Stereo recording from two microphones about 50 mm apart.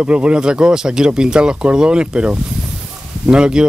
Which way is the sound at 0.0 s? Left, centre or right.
Right.